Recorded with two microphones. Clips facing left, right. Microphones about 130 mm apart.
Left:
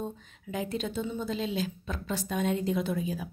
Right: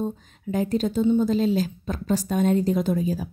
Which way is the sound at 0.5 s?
40° right (ahead or behind).